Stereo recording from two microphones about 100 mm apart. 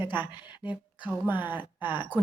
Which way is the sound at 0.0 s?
15° right (ahead or behind).